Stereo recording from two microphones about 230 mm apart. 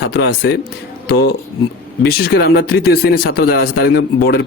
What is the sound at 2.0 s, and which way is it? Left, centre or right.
Speech, left.